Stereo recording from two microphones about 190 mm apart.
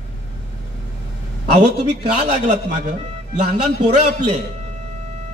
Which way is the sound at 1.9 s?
35° right (ahead or behind).